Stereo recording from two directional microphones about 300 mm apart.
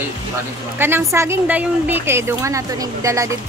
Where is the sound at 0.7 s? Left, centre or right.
Centre.